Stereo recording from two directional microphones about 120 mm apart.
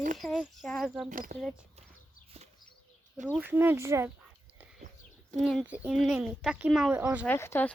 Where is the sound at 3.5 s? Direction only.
15° right (ahead or behind).